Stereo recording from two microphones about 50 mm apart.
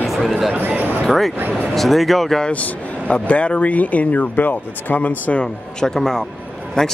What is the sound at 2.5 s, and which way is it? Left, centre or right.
Speech, left.